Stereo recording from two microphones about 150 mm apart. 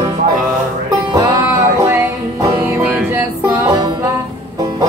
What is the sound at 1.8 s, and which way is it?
Music, 15° right (ahead or behind).